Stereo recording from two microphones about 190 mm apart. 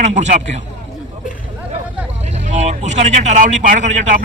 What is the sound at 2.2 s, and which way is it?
Speech, 35° right (ahead or behind).